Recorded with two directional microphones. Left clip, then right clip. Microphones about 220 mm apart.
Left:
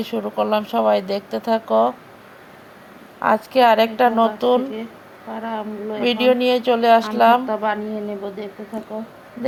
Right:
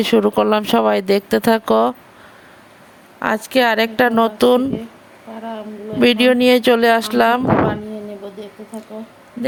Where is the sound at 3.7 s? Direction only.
40° right (ahead or behind).